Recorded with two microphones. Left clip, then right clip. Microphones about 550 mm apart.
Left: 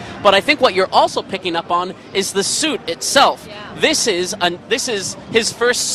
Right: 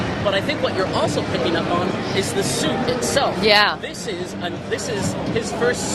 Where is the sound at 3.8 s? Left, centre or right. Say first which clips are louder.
Left 12 dB; left.